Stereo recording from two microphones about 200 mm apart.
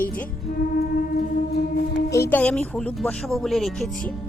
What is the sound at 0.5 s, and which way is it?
Music, 50° left (ahead or behind).